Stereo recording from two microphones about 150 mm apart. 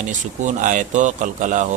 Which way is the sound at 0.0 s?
60° right (ahead or behind).